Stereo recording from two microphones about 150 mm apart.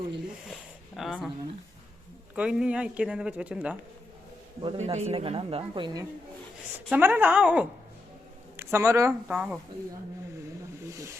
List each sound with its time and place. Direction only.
0.9 s a sound: centre (ahead or behind)
2.3 s speech: 5° right (ahead or behind)
4.8 s a woman's voice: 45° right (ahead or behind); by 6.1 s 30° right (ahead or behind)
6.9 s speech: 10° right (ahead or behind)
9.2 s speech: 5° right (ahead or behind)
10.8 s snake: 20° right (ahead or behind)